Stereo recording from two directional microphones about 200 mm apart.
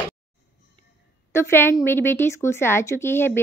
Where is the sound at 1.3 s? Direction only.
10° left (ahead or behind).